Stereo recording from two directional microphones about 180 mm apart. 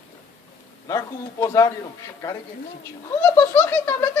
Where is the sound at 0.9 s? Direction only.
15° left (ahead or behind).